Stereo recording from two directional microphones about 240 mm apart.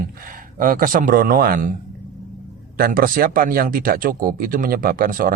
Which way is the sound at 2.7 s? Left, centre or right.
Right.